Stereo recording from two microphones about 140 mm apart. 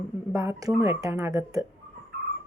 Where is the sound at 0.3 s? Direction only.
20° right (ahead or behind).